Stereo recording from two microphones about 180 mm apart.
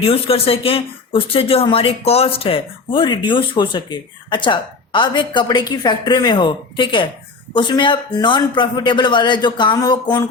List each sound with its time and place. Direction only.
0.0 s speech: 30° left (ahead or behind)